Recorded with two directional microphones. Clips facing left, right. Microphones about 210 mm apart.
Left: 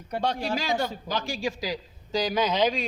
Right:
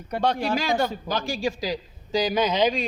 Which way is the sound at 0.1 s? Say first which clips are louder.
Right 4 dB; 65° right (ahead or behind).